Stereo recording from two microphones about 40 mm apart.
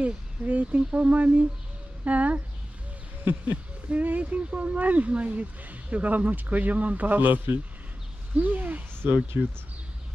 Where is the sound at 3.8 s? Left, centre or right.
Right.